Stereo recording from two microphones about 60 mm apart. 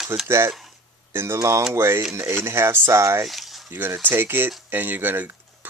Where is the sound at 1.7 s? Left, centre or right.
Right.